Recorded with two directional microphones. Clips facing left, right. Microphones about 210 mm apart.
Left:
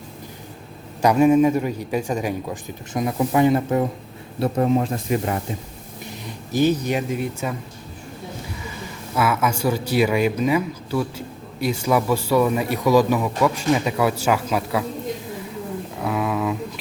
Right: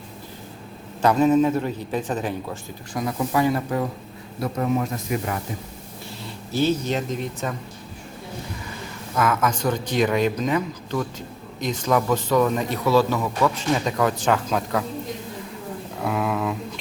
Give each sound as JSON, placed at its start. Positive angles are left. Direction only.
{"t": 1.0, "sound": "speech", "side_deg": 10}
{"t": 2.9, "sound": "speech", "side_deg": 20}
{"t": 6.1, "sound": "speech", "side_deg": 15}
{"t": 9.1, "sound": "speech", "side_deg": 10}
{"t": 16.0, "sound": "a sound", "side_deg": 0}